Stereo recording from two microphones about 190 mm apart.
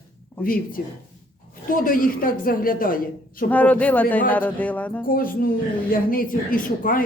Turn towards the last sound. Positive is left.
turn(degrees=45)  # may be behind; listen again after turning